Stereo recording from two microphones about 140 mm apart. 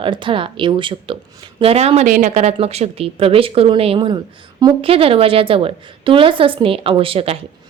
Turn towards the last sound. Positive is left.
turn(degrees=-45)  # may be behind; listen again after turning